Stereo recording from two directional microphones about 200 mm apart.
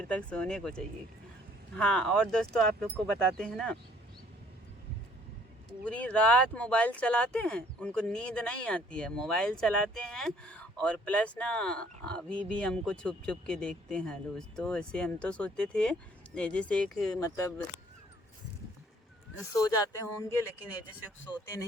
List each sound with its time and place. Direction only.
0.0 s speech: 5° left (ahead or behind)
5.8 s speech: 5° left (ahead or behind)
17.2 s speech: 15° left (ahead or behind)
19.4 s speech: 15° left (ahead or behind)
21.4 s speech: 15° left (ahead or behind)